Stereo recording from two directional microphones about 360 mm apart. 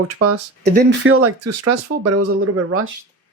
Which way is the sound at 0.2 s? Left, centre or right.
Right.